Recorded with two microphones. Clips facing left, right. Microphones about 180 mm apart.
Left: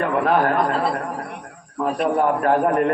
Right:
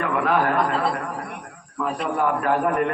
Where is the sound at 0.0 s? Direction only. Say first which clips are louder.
Left 3 dB; 40° left (ahead or behind).